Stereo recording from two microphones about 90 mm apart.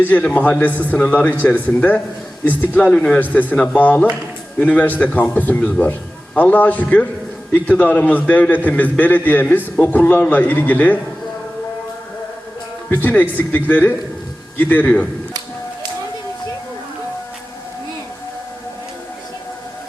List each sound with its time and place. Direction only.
0.0 s a man's voice: 15° left (ahead or behind)
12.9 s a man's voice: 20° left (ahead or behind)